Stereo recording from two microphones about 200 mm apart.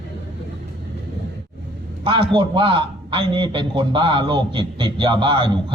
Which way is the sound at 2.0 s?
25° right (ahead or behind).